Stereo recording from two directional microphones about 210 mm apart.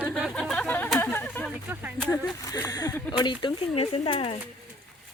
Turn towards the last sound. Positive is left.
turn(degrees=25)  # may be behind; listen again after turning